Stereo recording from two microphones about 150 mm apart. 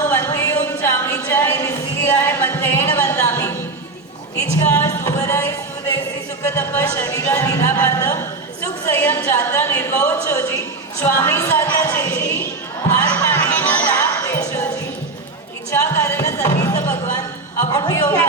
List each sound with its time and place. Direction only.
0.1 s a sound: 15° left (ahead or behind)
6.4 s a woman's voice: 20° left (ahead or behind)
13.1 s music: 15° left (ahead or behind)
15.7 s music: 20° left (ahead or behind)
17.7 s speech: 25° left (ahead or behind)
18.0 s a woman's voice: 10° left (ahead or behind)